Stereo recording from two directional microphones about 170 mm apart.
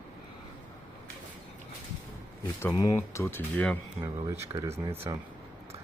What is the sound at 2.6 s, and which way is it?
Speech, 15° left (ahead or behind).